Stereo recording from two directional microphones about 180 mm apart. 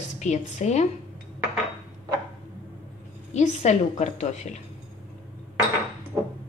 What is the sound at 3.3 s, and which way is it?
Speech, 40° left (ahead or behind).